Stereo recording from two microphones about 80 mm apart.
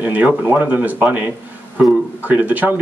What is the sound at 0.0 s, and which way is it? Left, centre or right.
Speech, right.